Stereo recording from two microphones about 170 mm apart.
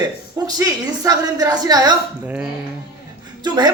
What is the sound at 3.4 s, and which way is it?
Speech, 25° right (ahead or behind).